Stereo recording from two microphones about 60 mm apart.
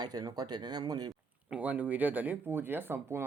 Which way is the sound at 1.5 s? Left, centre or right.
Right.